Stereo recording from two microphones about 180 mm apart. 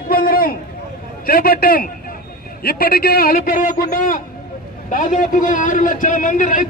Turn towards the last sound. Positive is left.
turn(degrees=45)  # may be behind; listen again after turning